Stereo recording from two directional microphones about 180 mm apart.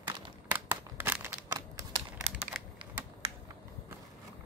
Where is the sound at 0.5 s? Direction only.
10° right (ahead or behind).